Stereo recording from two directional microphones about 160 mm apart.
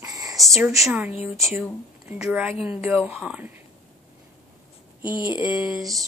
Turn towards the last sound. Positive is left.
turn(degrees=0)  # may be behind; listen again after turning